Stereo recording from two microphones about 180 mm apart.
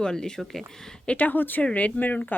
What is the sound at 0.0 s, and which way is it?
Speech, 5° left (ahead or behind).